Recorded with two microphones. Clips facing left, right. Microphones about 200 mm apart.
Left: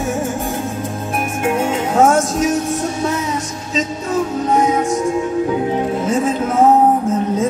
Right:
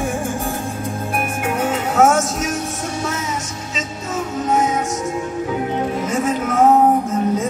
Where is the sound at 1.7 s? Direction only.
30° left (ahead or behind).